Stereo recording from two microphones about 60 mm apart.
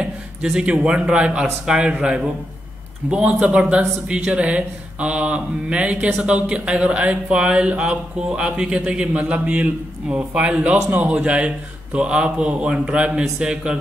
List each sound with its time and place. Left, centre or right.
0.0 s speech: centre